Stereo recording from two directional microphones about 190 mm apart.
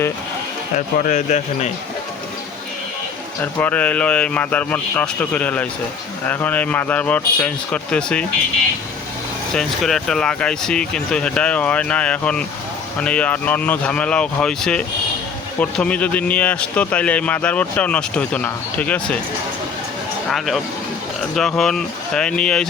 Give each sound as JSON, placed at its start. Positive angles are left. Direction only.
{"t": 0.9, "sound": "speech", "side_deg": 40}
{"t": 3.4, "sound": "a man's voice", "side_deg": 10}
{"t": 9.6, "sound": "a man's voice", "side_deg": 0}
{"t": 21.3, "sound": "speech", "side_deg": 0}